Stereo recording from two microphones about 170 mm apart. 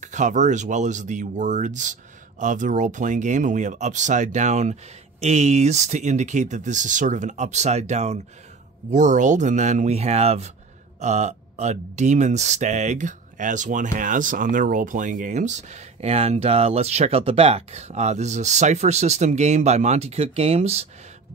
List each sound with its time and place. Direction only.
0.0 s speech: 45° right (ahead or behind)